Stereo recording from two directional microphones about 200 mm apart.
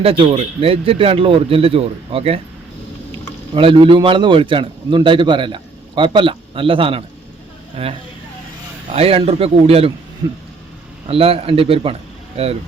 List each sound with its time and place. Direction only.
0.0 s a man's voice: 25° right (ahead or behind)
3.5 s a man's voice: 25° right (ahead or behind)